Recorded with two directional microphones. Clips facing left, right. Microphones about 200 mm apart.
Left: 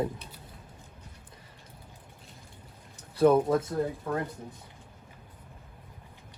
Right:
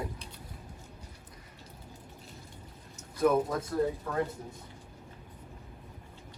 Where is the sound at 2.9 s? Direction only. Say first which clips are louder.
Left 4 dB; 30° left (ahead or behind).